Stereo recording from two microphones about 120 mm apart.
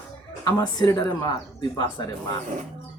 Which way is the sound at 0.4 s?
30° left (ahead or behind).